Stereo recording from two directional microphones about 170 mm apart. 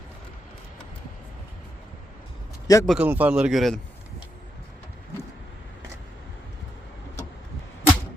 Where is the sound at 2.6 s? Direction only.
20° left (ahead or behind).